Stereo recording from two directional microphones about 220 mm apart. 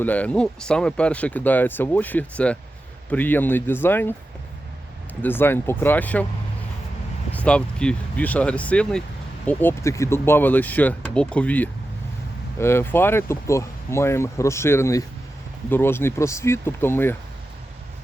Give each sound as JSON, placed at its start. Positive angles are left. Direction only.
{"t": 0.0, "sound": "speech", "side_deg": 5}
{"t": 5.2, "sound": "speech", "side_deg": 10}
{"t": 7.3, "sound": "speech", "side_deg": 5}